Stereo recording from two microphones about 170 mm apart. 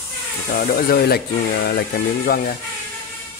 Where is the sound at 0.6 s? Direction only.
60° left (ahead or behind).